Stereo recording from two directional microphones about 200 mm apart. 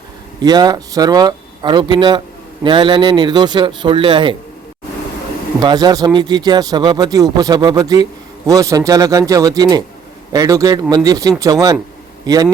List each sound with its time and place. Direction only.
0.4 s speech: 20° right (ahead or behind)
5.5 s speech: 20° right (ahead or behind)